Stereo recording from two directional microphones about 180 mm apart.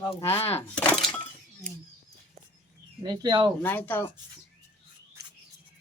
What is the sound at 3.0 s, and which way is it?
Speech, 25° right (ahead or behind).